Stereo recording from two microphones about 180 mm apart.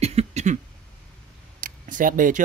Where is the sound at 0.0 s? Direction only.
35° right (ahead or behind).